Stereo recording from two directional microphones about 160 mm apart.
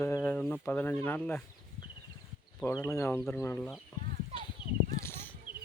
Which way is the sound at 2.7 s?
20° left (ahead or behind).